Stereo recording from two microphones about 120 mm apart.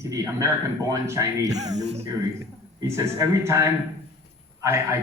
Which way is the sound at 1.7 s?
65° right (ahead or behind).